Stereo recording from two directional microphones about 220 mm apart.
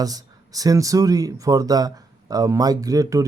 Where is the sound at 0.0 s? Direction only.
15° right (ahead or behind).